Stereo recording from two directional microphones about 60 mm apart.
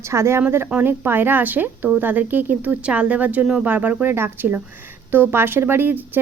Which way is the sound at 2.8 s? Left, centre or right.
Centre.